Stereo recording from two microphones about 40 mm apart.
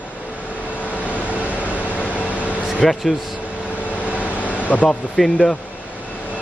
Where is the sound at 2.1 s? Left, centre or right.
Left.